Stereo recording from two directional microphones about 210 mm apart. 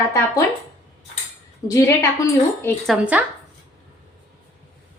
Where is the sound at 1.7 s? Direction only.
15° left (ahead or behind).